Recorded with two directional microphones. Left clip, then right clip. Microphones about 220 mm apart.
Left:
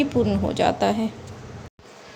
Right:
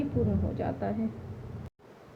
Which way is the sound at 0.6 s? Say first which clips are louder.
Left 15 dB; 30° left (ahead or behind).